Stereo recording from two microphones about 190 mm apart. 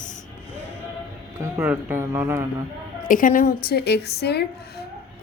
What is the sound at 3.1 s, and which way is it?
A woman's voice, 45° left (ahead or behind).